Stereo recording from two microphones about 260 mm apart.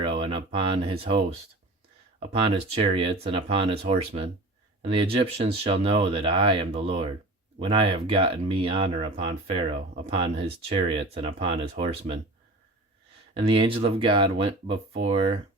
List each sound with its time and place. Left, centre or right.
0.0 s a sound: centre
2.8 s speech: right
13.5 s speech: centre